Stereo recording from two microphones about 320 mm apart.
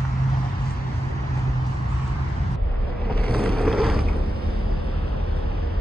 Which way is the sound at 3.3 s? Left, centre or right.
Right.